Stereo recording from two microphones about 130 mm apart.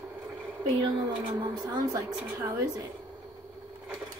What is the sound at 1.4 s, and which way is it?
A woman's voice, 35° right (ahead or behind).